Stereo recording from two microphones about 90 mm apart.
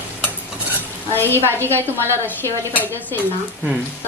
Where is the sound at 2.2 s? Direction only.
20° left (ahead or behind).